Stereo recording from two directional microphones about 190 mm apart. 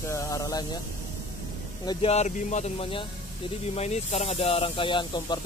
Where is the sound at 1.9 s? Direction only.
30° left (ahead or behind).